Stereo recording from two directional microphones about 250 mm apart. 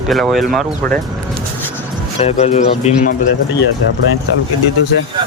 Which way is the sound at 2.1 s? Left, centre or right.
Left.